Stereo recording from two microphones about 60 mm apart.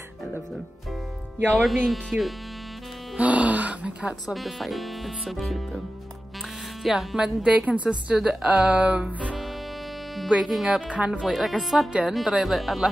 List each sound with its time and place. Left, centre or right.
1.5 s speech: centre
3.2 s speech: right
4.3 s speech: centre
6.8 s speech: centre
7.4 s music: right
10.3 s speech: centre